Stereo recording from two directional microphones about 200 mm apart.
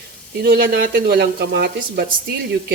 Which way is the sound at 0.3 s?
50° right (ahead or behind).